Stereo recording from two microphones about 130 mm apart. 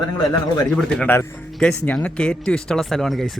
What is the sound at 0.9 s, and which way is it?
Speech, 5° left (ahead or behind).